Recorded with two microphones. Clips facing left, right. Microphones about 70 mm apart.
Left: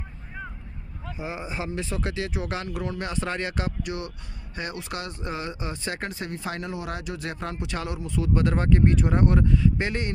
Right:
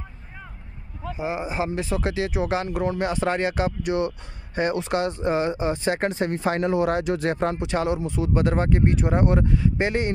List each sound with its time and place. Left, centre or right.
1.1 s speech: centre
3.8 s speech: right
6.1 s speech: right; by 10.1 s centre